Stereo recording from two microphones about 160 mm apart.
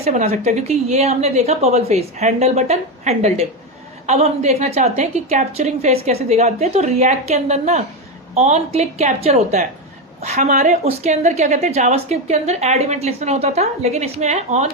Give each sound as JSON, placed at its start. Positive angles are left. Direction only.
{"t": 0.0, "sound": "a woman's voice", "side_deg": -45}